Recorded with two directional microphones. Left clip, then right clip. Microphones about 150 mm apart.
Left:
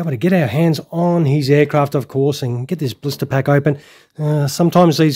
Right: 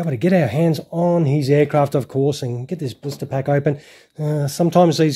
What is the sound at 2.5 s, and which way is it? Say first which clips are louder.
Speech: left 4 dB; 40° left (ahead or behind).